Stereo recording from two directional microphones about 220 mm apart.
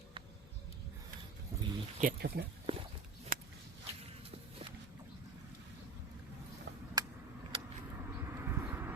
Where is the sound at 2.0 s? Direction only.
40° right (ahead or behind).